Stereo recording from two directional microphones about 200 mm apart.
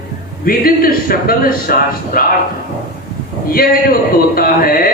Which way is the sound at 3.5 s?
45° left (ahead or behind).